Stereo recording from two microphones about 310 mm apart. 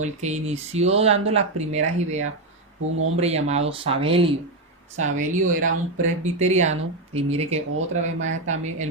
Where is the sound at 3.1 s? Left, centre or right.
Right.